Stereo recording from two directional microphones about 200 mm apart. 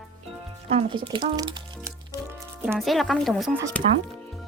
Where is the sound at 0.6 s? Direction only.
25° right (ahead or behind).